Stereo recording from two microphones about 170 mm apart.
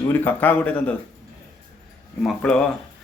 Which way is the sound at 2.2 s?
5° left (ahead or behind).